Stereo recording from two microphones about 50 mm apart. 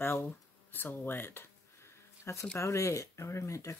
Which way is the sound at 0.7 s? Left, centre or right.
Left.